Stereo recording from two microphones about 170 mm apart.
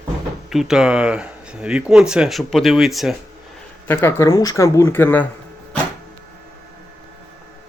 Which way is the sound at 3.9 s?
15° left (ahead or behind).